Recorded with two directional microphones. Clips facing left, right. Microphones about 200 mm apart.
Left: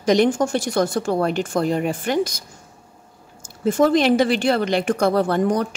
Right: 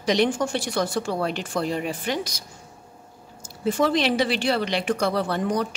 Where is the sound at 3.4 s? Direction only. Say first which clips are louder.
Left 5 dB; 45° left (ahead or behind).